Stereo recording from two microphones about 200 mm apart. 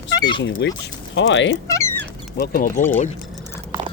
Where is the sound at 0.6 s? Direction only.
60° left (ahead or behind).